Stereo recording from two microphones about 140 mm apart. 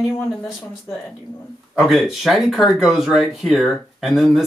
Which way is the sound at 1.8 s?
Centre (ahead or behind).